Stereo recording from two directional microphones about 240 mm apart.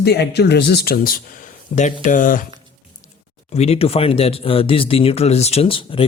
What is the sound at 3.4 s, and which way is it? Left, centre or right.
Speech, left.